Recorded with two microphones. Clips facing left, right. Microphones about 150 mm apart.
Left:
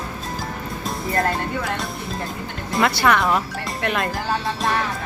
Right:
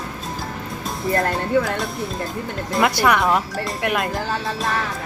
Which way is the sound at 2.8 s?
15° right (ahead or behind).